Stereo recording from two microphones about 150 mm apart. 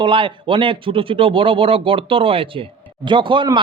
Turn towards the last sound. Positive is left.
turn(degrees=-30)  # may be behind; listen again after turning